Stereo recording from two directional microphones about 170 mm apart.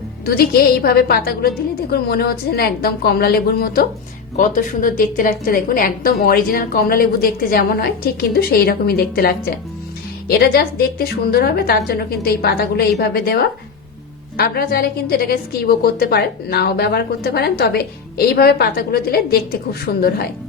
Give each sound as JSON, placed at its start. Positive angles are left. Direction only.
{"t": 0.3, "sound": "a woman's voice", "side_deg": 65}
{"t": 4.4, "sound": "a woman's voice", "side_deg": 50}